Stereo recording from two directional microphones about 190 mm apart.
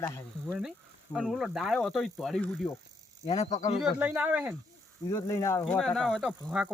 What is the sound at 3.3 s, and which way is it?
Speech, 35° left (ahead or behind).